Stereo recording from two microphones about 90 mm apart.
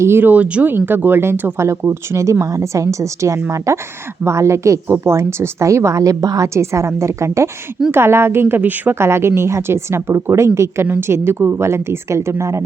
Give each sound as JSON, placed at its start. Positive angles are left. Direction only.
{"t": 0.0, "sound": "speech", "side_deg": -25}